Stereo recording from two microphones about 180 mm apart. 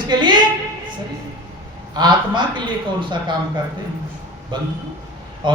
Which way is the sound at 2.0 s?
25° right (ahead or behind).